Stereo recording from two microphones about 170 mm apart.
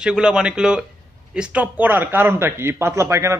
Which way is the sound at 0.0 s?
5° right (ahead or behind).